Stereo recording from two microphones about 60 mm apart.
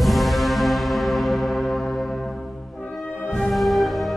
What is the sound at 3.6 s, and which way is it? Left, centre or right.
Music, centre.